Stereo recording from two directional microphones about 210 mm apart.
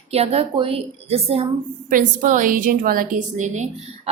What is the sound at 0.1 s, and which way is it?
A woman's voice, 30° right (ahead or behind).